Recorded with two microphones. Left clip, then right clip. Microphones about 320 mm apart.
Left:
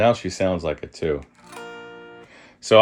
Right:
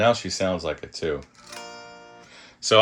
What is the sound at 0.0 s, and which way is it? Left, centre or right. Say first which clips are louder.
Speech: left 2 dB; left.